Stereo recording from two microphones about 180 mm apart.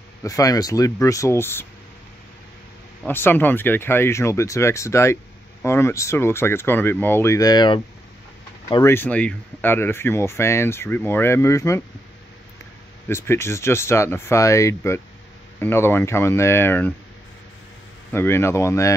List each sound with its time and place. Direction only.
0.2 s speech: 20° left (ahead or behind)
3.1 s speech: 10° left (ahead or behind)
8.9 s speech: 10° left (ahead or behind)
13.1 s speech: 15° left (ahead or behind)
18.1 s speech: 15° left (ahead or behind)